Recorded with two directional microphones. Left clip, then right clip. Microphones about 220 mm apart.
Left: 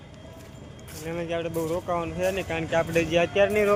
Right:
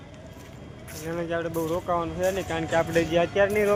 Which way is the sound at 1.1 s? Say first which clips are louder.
Right 1 dB; 5° right (ahead or behind).